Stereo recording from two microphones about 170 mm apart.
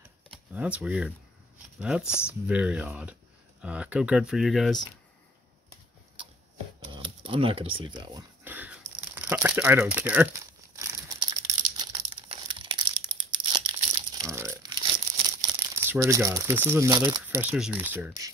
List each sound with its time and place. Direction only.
0.5 s speech: 5° right (ahead or behind)
6.8 s speech: 30° right (ahead or behind)
8.5 s crumpling: 10° right (ahead or behind)
11.1 s crumpling: 25° right (ahead or behind)
15.4 s speech: 15° right (ahead or behind)